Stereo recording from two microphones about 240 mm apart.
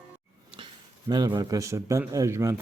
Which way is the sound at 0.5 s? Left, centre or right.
Centre.